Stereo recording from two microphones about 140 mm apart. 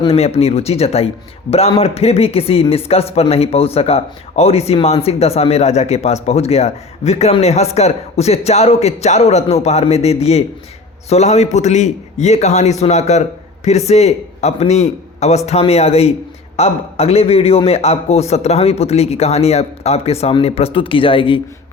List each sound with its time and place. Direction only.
0.0 s a man's voice: 45° left (ahead or behind)